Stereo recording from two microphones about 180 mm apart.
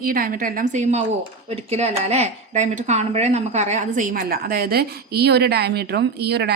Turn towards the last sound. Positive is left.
turn(degrees=-65)  # may be behind; listen again after turning